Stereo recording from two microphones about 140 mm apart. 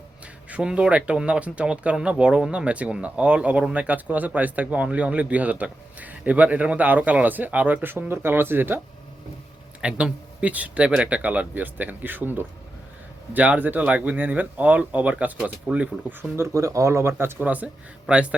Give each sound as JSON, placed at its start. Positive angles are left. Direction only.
{"t": 0.5, "sound": "speech", "side_deg": -5}
{"t": 9.8, "sound": "a man's voice", "side_deg": -10}